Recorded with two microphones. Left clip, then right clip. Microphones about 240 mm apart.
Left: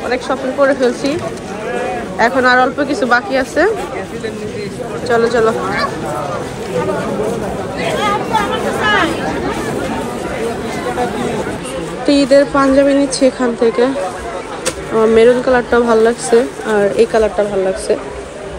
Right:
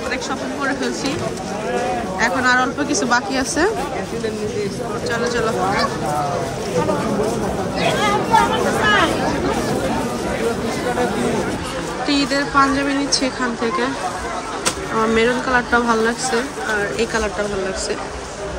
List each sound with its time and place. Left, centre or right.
0.6 s speech: centre
2.1 s a woman's voice: centre
5.0 s speech: centre
8.0 s a sound: right
12.1 s speech: centre
15.1 s speech: centre